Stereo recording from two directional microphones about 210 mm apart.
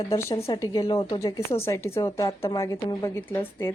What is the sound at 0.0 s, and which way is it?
Speech, 15° left (ahead or behind).